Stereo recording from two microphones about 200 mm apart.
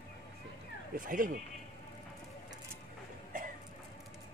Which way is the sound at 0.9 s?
45° right (ahead or behind).